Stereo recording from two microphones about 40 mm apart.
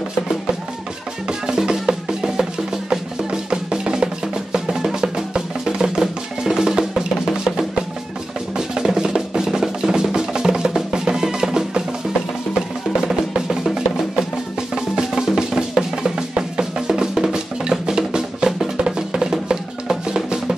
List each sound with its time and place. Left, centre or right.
1.5 s music: centre
8.5 s music: centre
12.9 s music: centre
15.0 s music: centre
15.5 s drum: centre
16.3 s music: right